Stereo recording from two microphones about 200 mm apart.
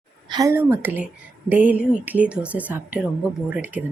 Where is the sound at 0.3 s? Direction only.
20° right (ahead or behind).